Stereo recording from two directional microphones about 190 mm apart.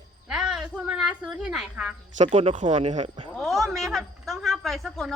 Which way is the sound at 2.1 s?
35° right (ahead or behind).